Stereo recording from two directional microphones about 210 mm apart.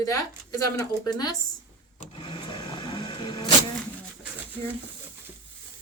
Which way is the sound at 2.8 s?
20° left (ahead or behind).